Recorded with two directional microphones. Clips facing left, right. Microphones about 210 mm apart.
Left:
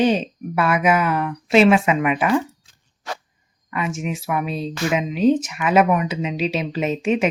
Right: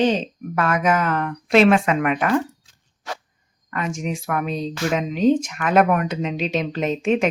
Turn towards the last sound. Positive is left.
turn(degrees=5)  # may be behind; listen again after turning